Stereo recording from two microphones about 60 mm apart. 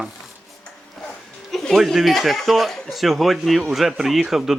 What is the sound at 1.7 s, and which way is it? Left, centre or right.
Speech, centre.